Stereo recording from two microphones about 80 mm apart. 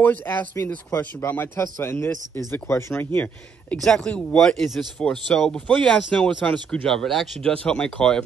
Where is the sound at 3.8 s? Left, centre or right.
Centre.